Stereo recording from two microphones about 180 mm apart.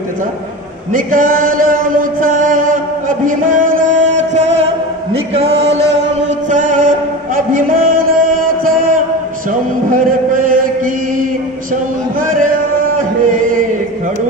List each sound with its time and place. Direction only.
0.9 s chant: 50° right (ahead or behind)
3.3 s music: 50° right (ahead or behind)
9.8 s chant: 50° right (ahead or behind)
12.9 s music: 45° right (ahead or behind)